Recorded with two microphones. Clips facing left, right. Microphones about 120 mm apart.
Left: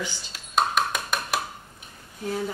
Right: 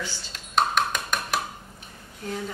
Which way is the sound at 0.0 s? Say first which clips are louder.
Left 1 dB; 5° left (ahead or behind).